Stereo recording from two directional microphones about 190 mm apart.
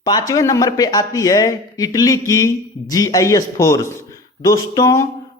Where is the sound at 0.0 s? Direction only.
20° left (ahead or behind).